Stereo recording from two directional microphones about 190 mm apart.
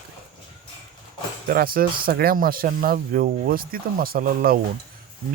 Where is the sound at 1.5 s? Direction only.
50° right (ahead or behind).